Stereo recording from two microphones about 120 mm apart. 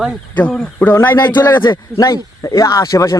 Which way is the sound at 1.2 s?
35° left (ahead or behind).